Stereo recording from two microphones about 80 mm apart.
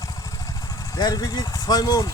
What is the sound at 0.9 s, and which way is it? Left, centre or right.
Speech, left.